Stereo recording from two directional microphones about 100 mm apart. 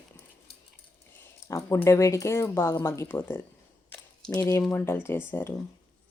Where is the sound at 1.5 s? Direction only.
30° left (ahead or behind).